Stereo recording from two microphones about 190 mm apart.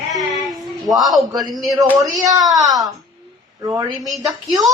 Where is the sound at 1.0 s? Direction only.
Centre (ahead or behind).